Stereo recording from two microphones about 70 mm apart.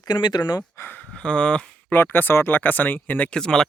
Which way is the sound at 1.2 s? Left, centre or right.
Centre.